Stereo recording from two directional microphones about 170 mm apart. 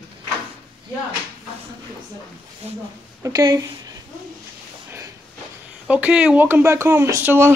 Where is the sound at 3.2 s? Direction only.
20° right (ahead or behind).